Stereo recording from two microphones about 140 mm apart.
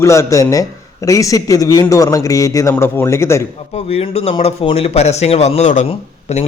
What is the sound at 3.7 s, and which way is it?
Speech, 45° left (ahead or behind).